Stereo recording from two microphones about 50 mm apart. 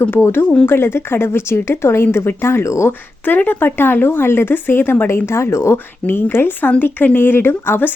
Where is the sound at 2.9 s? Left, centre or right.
Left.